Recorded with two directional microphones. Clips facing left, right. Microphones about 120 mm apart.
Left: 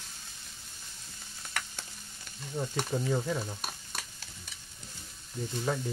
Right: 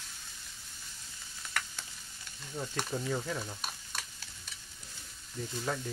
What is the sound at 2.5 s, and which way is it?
Sizzle, 15° left (ahead or behind).